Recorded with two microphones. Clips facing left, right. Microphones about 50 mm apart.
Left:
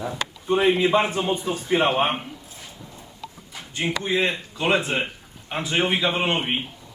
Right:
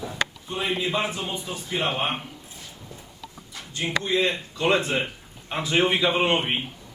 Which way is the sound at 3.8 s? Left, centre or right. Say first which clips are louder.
Even; left.